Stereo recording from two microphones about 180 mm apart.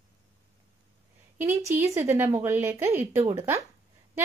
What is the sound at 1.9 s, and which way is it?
A woman's voice, 15° right (ahead or behind).